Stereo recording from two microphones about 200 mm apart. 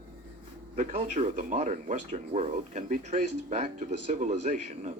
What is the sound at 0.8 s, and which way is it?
Speech, 35° right (ahead or behind).